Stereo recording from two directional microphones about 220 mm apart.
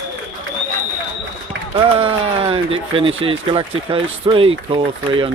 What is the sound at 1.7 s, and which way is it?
Speech, 25° right (ahead or behind).